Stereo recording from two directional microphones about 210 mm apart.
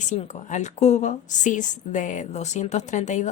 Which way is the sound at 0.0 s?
35° left (ahead or behind).